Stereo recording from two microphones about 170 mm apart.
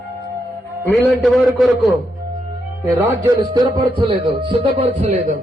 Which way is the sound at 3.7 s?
30° right (ahead or behind).